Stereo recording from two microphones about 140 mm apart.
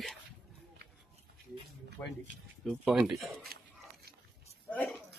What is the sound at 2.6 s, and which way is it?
Speech, 5° right (ahead or behind).